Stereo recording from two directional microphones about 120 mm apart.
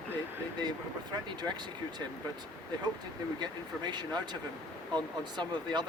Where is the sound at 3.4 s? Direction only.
35° right (ahead or behind).